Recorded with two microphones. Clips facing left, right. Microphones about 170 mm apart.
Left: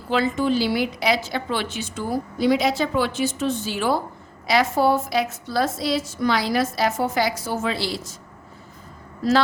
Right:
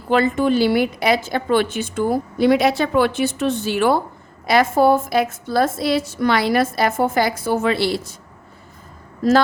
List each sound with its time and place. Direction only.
0.1 s a woman's voice: 55° right (ahead or behind)
4.4 s a woman's voice: 50° right (ahead or behind)
9.2 s a woman's voice: 45° right (ahead or behind)